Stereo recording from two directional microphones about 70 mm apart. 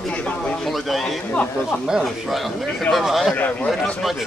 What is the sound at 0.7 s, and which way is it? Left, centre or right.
Speech, centre.